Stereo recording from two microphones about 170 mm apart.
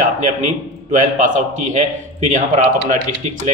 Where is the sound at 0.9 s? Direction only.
45° right (ahead or behind).